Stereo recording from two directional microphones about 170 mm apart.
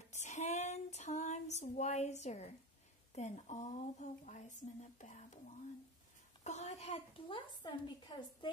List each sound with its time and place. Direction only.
0.1 s female singing: 45° left (ahead or behind)
3.2 s speech: 45° left (ahead or behind)
6.4 s a woman's voice: 45° left (ahead or behind); by 8.5 s 25° left (ahead or behind)